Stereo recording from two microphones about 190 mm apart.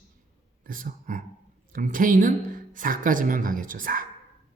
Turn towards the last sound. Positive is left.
turn(degrees=-45)  # may be behind; listen again after turning